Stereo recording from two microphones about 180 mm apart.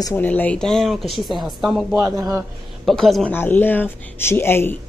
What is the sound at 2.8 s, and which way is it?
A woman's voice, centre (ahead or behind).